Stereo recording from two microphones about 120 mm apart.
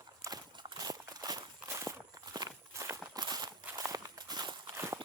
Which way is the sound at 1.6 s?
25° right (ahead or behind).